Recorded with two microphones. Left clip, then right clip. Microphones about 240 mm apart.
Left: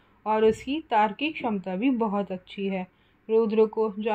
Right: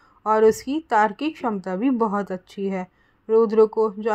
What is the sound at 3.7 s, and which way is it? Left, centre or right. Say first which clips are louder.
Speech: right 5 dB; right.